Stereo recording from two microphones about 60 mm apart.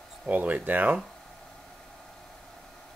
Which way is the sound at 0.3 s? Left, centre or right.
Right.